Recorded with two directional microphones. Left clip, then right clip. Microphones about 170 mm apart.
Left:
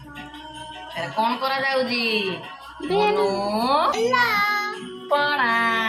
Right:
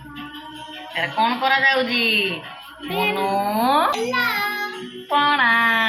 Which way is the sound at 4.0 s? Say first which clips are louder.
Left 2 dB; 70° left (ahead or behind).